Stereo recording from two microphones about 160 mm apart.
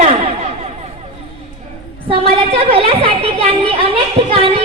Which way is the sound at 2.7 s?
35° right (ahead or behind).